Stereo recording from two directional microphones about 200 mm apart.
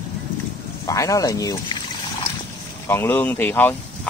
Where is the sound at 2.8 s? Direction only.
10° left (ahead or behind).